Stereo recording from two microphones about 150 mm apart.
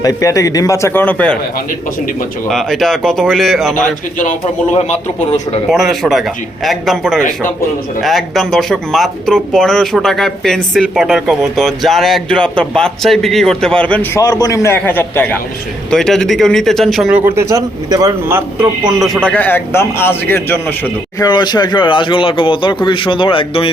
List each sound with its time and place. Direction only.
0.0 s a man's voice: 20° left (ahead or behind)
2.5 s speech: centre (ahead or behind)
4.2 s a man's voice: 50° left (ahead or behind)
5.7 s speech: centre (ahead or behind)
14.2 s a man's voice: 25° left (ahead or behind)
21.2 s speech: 30° left (ahead or behind)